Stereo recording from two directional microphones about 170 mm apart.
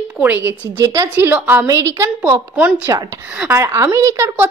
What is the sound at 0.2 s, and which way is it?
A woman's voice, 10° right (ahead or behind).